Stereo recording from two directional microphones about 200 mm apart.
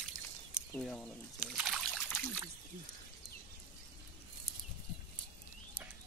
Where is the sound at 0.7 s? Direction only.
5° left (ahead or behind).